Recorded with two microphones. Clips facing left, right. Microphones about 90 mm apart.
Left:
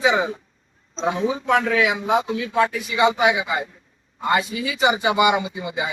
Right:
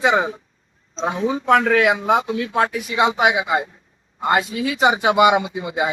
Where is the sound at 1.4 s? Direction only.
50° right (ahead or behind).